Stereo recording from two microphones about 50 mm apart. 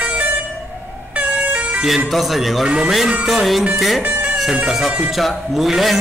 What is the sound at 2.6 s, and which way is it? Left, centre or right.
Speech, centre.